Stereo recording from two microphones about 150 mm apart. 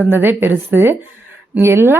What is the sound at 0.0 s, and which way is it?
Speech, 15° right (ahead or behind).